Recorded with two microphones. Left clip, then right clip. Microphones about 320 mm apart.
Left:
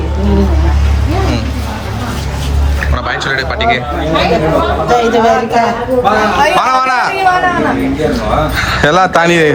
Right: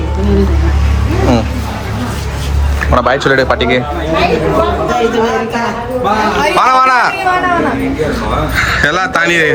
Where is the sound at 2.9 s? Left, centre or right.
Centre.